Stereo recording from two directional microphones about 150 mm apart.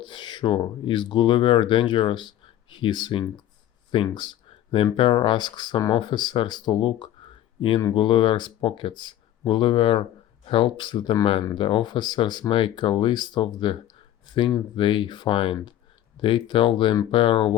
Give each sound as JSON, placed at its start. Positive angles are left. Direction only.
{"t": 0.0, "sound": "speech", "side_deg": 30}